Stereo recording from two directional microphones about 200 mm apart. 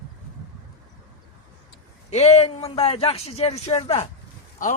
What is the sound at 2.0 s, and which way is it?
A man's voice, 35° left (ahead or behind).